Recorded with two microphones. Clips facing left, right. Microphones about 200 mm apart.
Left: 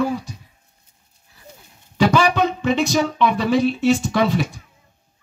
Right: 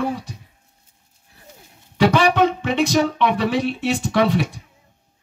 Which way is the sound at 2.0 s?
55° right (ahead or behind).